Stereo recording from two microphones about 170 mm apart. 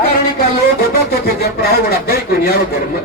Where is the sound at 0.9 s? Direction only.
70° left (ahead or behind).